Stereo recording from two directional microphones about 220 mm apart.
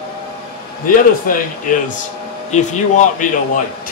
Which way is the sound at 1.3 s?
40° left (ahead or behind).